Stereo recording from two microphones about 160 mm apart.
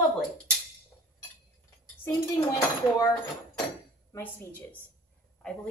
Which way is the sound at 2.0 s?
20° left (ahead or behind).